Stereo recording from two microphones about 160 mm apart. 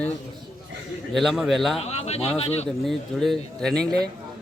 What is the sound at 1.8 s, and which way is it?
Speech, 40° left (ahead or behind).